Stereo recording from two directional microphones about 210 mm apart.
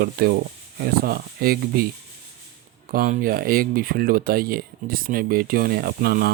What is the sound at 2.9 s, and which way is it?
Speech, 40° right (ahead or behind).